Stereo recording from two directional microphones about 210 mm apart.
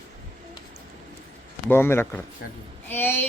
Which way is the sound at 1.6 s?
10° left (ahead or behind).